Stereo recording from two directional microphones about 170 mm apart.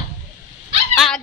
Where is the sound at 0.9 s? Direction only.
Centre (ahead or behind).